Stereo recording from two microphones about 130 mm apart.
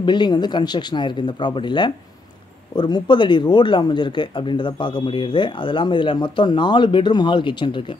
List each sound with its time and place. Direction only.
0.0 s speech: 35° left (ahead or behind)